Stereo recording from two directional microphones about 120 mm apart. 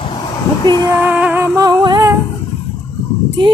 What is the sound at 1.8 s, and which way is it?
Humming, 35° right (ahead or behind).